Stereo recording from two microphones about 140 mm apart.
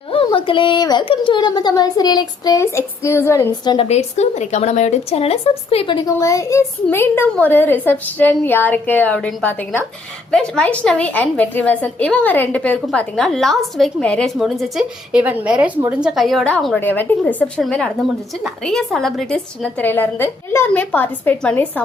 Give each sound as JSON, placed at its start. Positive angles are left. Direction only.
{"t": 0.1, "sound": "a child's voice", "side_deg": 40}
{"t": 3.6, "sound": "a woman's voice", "side_deg": 30}
{"t": 3.8, "sound": "speech", "side_deg": 50}
{"t": 6.1, "sound": "a woman's voice", "side_deg": 25}